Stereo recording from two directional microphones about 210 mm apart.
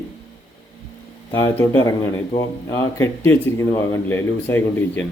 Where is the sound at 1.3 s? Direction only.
10° left (ahead or behind).